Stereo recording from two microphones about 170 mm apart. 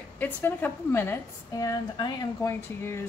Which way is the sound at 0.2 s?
10° left (ahead or behind).